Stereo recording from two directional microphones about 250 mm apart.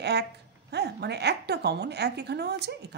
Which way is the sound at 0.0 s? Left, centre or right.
Right.